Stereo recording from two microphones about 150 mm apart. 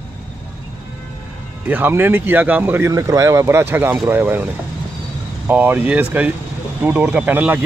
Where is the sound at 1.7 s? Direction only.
15° right (ahead or behind).